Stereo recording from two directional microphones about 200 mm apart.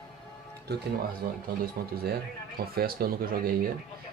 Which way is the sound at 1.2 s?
45° right (ahead or behind).